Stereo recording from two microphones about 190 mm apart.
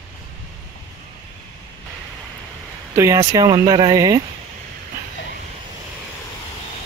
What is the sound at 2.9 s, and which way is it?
Speech, 15° right (ahead or behind).